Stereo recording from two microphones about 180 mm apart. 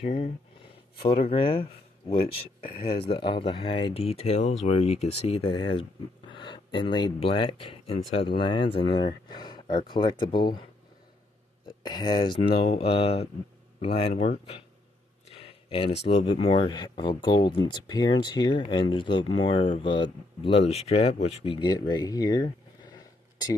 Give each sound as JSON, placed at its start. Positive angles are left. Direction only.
{"t": 0.0, "sound": "speech", "side_deg": 35}
{"t": 2.6, "sound": "speech", "side_deg": 55}
{"t": 2.9, "sound": "speech", "side_deg": 30}
{"t": 11.8, "sound": "speech", "side_deg": 25}
{"t": 15.2, "sound": "a sound", "side_deg": 30}
{"t": 16.1, "sound": "speech", "side_deg": 35}
{"t": 21.5, "sound": "a sound", "side_deg": 25}